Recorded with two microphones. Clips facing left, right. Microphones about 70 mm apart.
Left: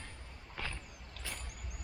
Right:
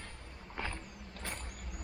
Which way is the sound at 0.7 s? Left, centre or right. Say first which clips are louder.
Right 4 dB; right.